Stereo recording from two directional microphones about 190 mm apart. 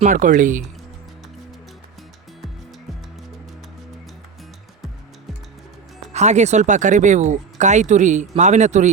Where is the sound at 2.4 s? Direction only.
Centre (ahead or behind).